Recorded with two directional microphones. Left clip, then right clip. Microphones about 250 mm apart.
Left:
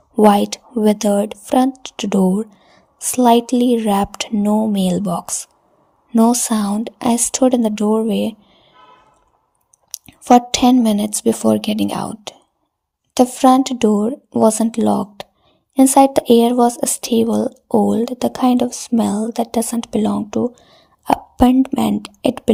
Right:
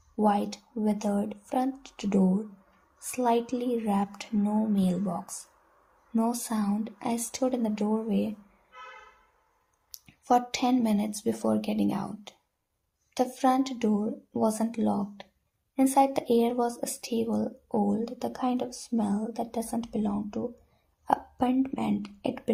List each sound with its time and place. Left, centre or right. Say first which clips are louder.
0.2 s speech: left 14 dB; left
9.9 s speech: left 13 dB; left